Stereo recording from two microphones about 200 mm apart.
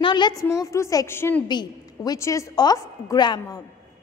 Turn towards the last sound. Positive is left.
turn(degrees=20)  # may be behind; listen again after turning